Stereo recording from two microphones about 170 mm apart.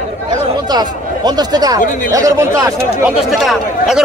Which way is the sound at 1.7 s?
50° left (ahead or behind).